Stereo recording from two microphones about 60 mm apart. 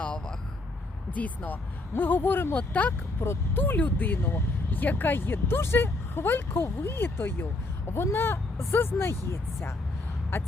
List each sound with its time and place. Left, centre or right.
0.0 s vehicle: left
1.1 s speech: left
1.9 s speech: left
2.6 s speech: left
3.2 s speech: left
3.6 s speech: left